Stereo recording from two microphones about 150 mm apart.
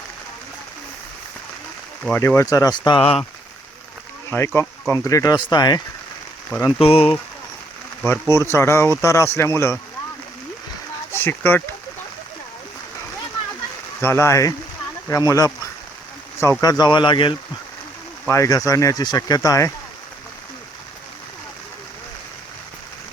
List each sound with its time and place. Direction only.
2.1 s speech: 15° left (ahead or behind); by 3.2 s 35° left (ahead or behind)
4.3 s speech: 15° left (ahead or behind)
6.7 s speech: 40° left (ahead or behind)
8.0 s speech: 15° left (ahead or behind)
11.1 s speech: 15° left (ahead or behind)
14.0 s speech: 15° left (ahead or behind); by 17.3 s 35° left (ahead or behind)
18.3 s speech: 20° left (ahead or behind)